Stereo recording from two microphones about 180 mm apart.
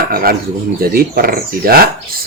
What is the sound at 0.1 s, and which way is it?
Speech, 55° right (ahead or behind).